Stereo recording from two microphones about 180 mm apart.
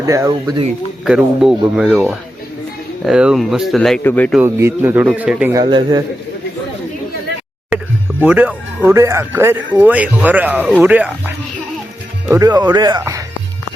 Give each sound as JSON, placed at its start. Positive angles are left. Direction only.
{"t": 0.0, "sound": "speech", "side_deg": -15}
{"t": 1.0, "sound": "speech", "side_deg": -5}
{"t": 4.4, "sound": "speech", "side_deg": -15}
{"t": 5.6, "sound": "speech", "side_deg": -25}
{"t": 8.3, "sound": "speech", "side_deg": -10}
{"t": 12.3, "sound": "speech", "side_deg": -20}